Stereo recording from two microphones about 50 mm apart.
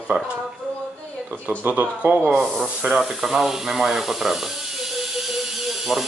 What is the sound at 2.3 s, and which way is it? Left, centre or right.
Speech, centre.